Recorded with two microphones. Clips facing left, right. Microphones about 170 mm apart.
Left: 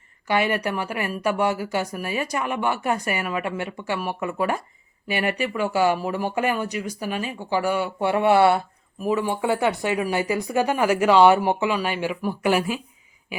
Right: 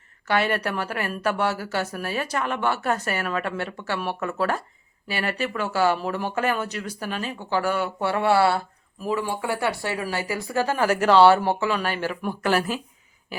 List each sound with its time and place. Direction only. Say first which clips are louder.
0.3 s speech: left 1 dB; 10° left (ahead or behind)